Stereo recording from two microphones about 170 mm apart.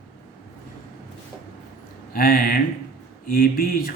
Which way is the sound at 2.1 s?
60° left (ahead or behind).